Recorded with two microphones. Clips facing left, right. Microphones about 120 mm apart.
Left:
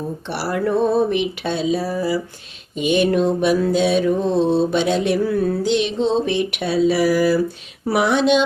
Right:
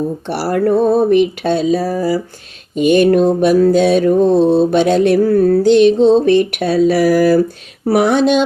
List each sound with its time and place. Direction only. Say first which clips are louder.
0.3 s mantra: right 6 dB; 45° right (ahead or behind)